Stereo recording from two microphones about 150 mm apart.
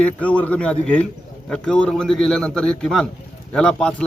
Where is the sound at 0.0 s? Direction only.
10° left (ahead or behind).